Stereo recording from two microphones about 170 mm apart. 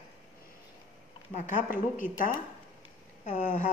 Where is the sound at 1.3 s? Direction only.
50° left (ahead or behind).